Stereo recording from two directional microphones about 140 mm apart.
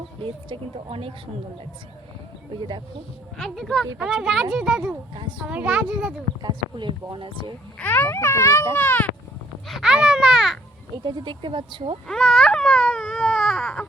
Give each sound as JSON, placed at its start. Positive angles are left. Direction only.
{"t": 0.2, "sound": "speech", "side_deg": -40}
{"t": 3.3, "sound": "a woman's voice", "side_deg": 0}
{"t": 6.4, "sound": "speech", "side_deg": -35}
{"t": 7.8, "sound": "a child's voice", "side_deg": 15}
{"t": 9.6, "sound": "speech", "side_deg": -5}
{"t": 11.0, "sound": "speech", "side_deg": -35}
{"t": 12.0, "sound": "baby cry", "side_deg": 5}